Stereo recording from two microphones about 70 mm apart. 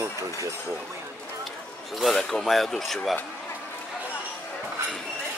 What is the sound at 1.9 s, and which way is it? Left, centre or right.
A man's voice, centre.